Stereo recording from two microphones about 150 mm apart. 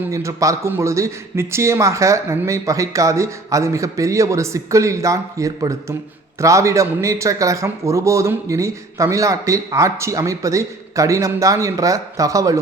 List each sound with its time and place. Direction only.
0.0 s a man's voice: 20° right (ahead or behind)